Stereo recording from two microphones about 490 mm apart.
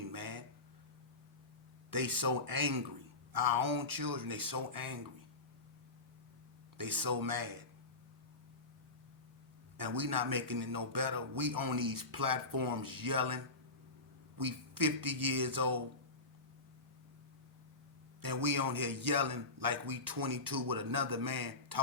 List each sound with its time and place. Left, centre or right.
0.1 s a sound: right
1.9 s a man's voice: right
6.7 s a man's voice: right
9.7 s a man's voice: right
18.2 s a man's voice: right